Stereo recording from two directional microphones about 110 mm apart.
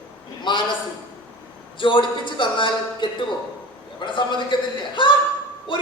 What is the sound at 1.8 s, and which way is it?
A man's voice, 45° left (ahead or behind).